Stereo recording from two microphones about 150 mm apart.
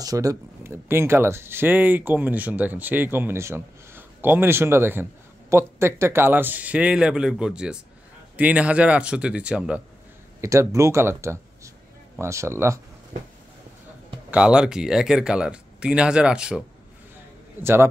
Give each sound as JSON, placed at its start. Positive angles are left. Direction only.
{"t": 0.0, "sound": "speech", "side_deg": -25}
{"t": 10.4, "sound": "speech", "side_deg": -20}
{"t": 13.1, "sound": "a sound", "side_deg": -65}
{"t": 14.3, "sound": "speech", "side_deg": -5}
{"t": 17.6, "sound": "speech", "side_deg": -15}